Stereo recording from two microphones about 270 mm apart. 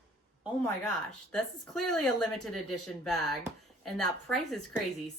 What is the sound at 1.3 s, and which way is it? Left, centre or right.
A woman's voice, centre.